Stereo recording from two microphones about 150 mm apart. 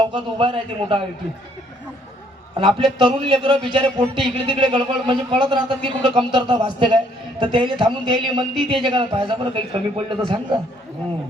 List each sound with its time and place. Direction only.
0.1 s speech: 35° right (ahead or behind)
2.6 s speech: 30° right (ahead or behind)